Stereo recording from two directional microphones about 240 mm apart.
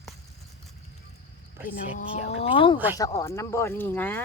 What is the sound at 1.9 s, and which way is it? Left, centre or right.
Speech, left.